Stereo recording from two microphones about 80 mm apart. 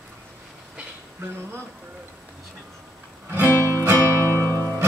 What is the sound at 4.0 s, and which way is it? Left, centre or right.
Music, left.